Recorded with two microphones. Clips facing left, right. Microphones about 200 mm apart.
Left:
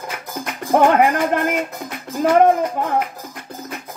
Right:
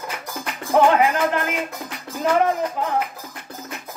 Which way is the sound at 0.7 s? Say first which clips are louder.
Left 2 dB; 55° left (ahead or behind).